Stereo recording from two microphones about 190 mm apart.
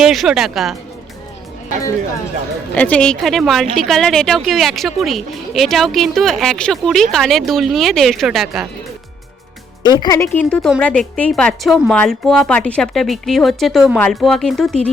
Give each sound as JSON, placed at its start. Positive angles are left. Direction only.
{"t": 0.0, "sound": "speech", "side_deg": 0}
{"t": 2.7, "sound": "speech", "side_deg": 5}
{"t": 9.8, "sound": "speech", "side_deg": 20}
{"t": 10.3, "sound": "speech", "side_deg": 5}